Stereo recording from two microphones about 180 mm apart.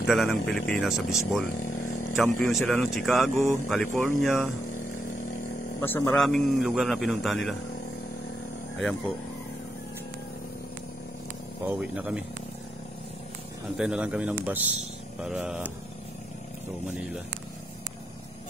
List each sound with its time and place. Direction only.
0.0 s speech: centre (ahead or behind)
1.6 s a sound: 45° left (ahead or behind)
2.1 s speech: centre (ahead or behind)
4.7 s a sound: 45° left (ahead or behind)
5.8 s speech: 15° left (ahead or behind)
6.1 s speech: centre (ahead or behind)
11.6 s speech: 10° right (ahead or behind)
13.7 s speech: 5° right (ahead or behind)